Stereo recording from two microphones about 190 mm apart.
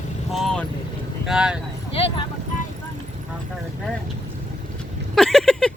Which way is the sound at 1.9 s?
30° left (ahead or behind).